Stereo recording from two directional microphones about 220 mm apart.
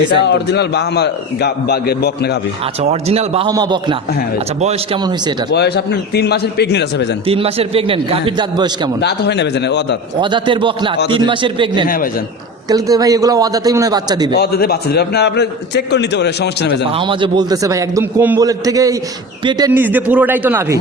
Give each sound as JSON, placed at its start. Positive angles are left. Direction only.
{"t": 0.3, "sound": "a man's voice", "side_deg": 50}
{"t": 2.8, "sound": "a man's voice", "side_deg": -30}
{"t": 5.5, "sound": "a man's voice", "side_deg": 50}
{"t": 7.3, "sound": "a man's voice", "side_deg": -25}
{"t": 9.0, "sound": "a man's voice", "side_deg": 50}
{"t": 10.2, "sound": "a man's voice", "side_deg": -20}
{"t": 14.3, "sound": "a man's voice", "side_deg": 45}
{"t": 16.9, "sound": "a man's voice", "side_deg": -20}